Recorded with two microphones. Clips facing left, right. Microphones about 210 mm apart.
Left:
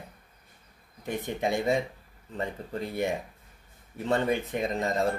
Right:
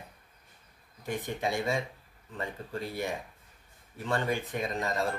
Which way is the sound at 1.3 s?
20° left (ahead or behind).